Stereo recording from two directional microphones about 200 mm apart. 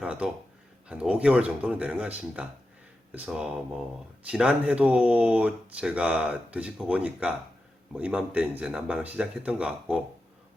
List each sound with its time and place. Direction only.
0.0 s speech: 5° right (ahead or behind)